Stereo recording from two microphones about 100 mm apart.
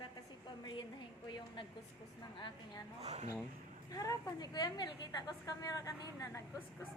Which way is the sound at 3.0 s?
90° right.